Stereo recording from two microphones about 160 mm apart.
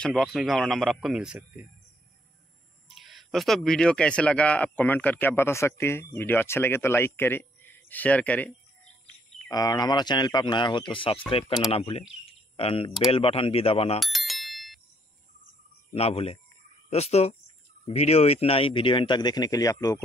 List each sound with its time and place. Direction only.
0.0 s speech: centre (ahead or behind)
2.9 s speech: centre (ahead or behind)
9.5 s speech: 25° left (ahead or behind)
12.3 s a sound: 35° left (ahead or behind)
13.1 s speech: 35° left (ahead or behind)
13.9 s bicycle bell: centre (ahead or behind)
15.9 s speech: 40° left (ahead or behind); by 20.0 s 20° left (ahead or behind)